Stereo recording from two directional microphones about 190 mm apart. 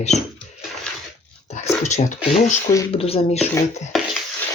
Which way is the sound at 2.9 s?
30° left (ahead or behind).